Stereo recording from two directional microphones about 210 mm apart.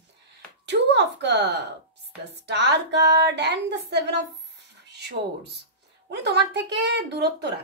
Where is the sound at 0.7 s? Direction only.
55° right (ahead or behind).